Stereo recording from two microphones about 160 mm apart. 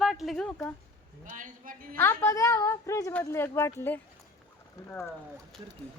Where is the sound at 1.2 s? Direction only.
55° right (ahead or behind).